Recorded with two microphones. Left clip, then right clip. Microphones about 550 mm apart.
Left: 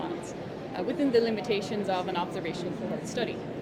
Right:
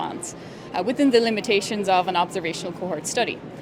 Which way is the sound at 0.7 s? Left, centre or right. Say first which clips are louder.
Right 7 dB; right.